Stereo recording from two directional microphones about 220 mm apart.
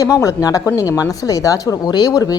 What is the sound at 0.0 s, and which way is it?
A man's voice, 15° left (ahead or behind).